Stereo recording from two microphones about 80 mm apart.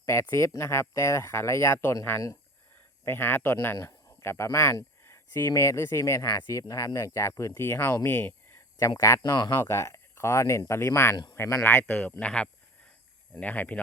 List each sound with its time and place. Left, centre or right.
0.0 s speech: left
3.1 s speech: left
8.0 s a sound: left
9.0 s speech: left
9.2 s speech: left
9.6 s speech: left